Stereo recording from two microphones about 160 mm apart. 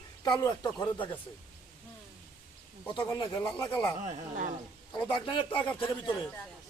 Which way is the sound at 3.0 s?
20° left (ahead or behind).